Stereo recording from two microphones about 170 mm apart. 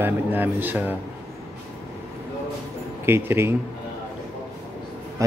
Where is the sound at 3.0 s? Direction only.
15° right (ahead or behind).